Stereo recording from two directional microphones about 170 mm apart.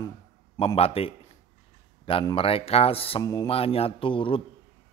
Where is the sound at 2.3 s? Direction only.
35° left (ahead or behind).